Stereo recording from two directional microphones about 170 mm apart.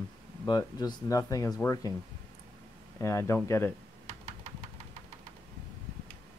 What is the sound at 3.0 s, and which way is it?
Speech, 15° left (ahead or behind).